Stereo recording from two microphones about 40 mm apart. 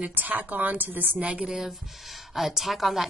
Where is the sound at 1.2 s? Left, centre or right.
Right.